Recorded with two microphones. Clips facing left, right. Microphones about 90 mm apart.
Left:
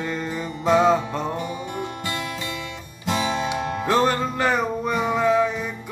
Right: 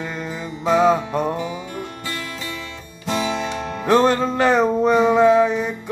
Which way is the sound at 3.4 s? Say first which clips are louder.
Left 1 dB; 10° left (ahead or behind).